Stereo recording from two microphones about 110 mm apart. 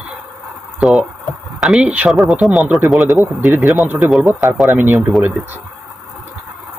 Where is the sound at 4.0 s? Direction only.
5° right (ahead or behind).